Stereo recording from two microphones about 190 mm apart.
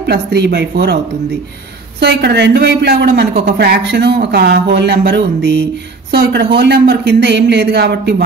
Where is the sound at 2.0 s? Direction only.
60° right (ahead or behind).